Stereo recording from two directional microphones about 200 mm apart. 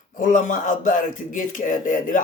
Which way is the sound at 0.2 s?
40° left (ahead or behind).